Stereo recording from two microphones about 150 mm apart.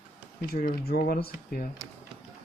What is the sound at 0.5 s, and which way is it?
Speech, 85° left.